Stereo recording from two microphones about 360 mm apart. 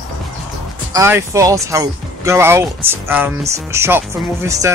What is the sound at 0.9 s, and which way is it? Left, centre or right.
Speech, centre.